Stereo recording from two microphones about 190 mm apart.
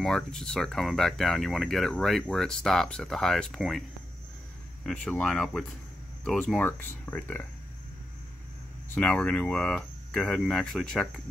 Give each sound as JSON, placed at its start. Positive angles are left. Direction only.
{"t": 0.0, "sound": "speech", "side_deg": 5}
{"t": 4.8, "sound": "speech", "side_deg": 5}
{"t": 8.9, "sound": "speech", "side_deg": 5}